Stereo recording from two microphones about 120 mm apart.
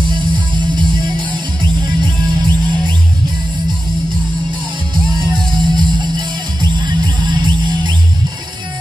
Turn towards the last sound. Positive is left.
turn(degrees=-40)  # may be behind; listen again after turning